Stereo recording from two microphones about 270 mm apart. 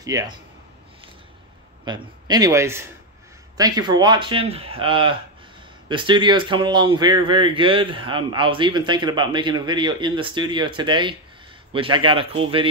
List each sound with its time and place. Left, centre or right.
0.0 s a man's voice: centre
1.9 s a man's voice: centre